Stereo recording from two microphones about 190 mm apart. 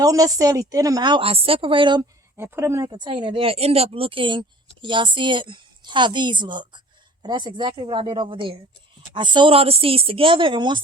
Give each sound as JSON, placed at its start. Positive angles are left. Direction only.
{"t": 0.0, "sound": "a woman's voice", "side_deg": -20}